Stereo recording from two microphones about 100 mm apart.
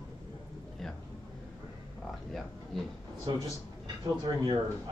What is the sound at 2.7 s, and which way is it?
Speech, 5° left (ahead or behind).